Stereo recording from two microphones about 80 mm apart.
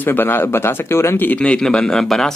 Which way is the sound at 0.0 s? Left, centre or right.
Left.